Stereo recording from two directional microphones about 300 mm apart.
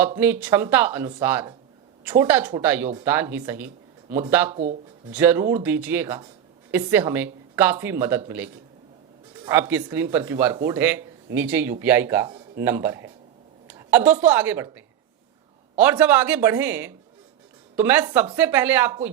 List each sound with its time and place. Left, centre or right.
0.2 s speech: centre
9.4 s a woman's voice: centre